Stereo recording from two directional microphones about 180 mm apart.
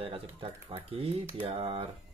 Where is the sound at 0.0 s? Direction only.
30° right (ahead or behind).